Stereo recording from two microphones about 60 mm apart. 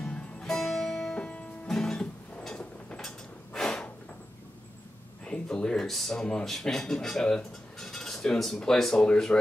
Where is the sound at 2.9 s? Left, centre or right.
Centre.